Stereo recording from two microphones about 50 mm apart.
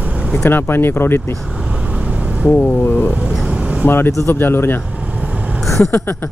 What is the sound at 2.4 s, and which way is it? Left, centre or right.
Speech, left.